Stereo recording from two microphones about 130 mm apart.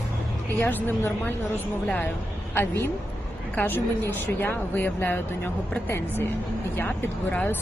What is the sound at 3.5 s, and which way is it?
Speech, 15° left (ahead or behind).